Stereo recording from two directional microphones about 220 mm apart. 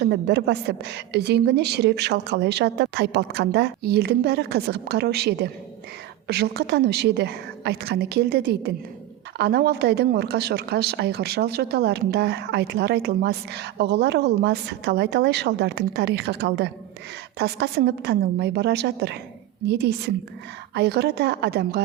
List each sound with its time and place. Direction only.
0.0 s a woman's voice: 50° right (ahead or behind)